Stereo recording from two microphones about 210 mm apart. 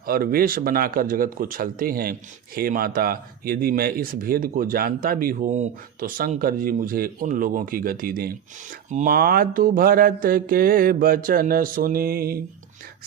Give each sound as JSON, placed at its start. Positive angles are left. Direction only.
{"t": 0.0, "sound": "speech", "side_deg": -45}